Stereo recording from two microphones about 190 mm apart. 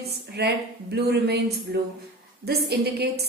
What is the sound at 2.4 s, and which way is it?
Speech, 60° right (ahead or behind).